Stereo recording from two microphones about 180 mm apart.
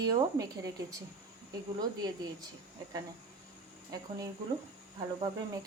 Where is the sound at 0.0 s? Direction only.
20° right (ahead or behind).